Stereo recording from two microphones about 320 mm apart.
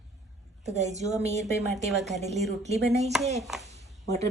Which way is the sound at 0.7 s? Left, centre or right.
Right.